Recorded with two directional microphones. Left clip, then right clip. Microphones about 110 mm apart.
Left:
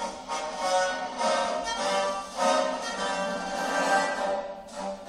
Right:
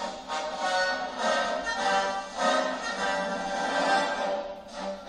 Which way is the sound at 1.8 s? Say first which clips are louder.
Right 2 dB; 15° left (ahead or behind).